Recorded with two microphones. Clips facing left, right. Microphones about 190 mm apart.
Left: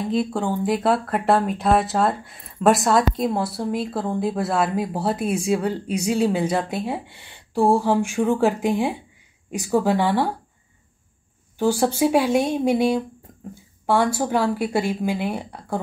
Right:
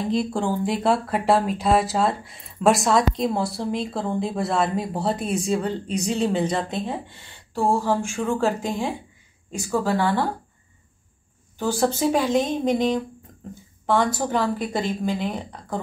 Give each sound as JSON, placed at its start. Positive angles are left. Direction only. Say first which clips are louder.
{"t": 0.1, "sound": "a woman's voice", "louder": "left 1 dB", "side_deg": 0}
{"t": 11.5, "sound": "a woman's voice", "louder": "left 2 dB", "side_deg": 10}
{"t": 13.3, "sound": "a sound", "louder": "left 1 dB", "side_deg": 5}
{"t": 13.8, "sound": "a woman's voice", "louder": "left 1 dB", "side_deg": 10}